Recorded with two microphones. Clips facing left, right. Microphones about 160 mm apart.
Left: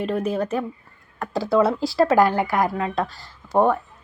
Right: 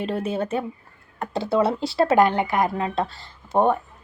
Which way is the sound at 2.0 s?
25° right (ahead or behind).